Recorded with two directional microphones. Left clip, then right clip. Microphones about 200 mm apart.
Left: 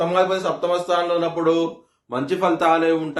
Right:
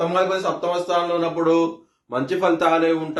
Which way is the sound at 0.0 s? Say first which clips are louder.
Left 1 dB; 25° left (ahead or behind).